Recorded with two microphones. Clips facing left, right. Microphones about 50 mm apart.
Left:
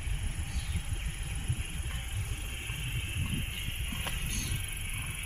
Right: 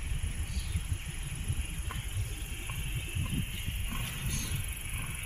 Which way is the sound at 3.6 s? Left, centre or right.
Left.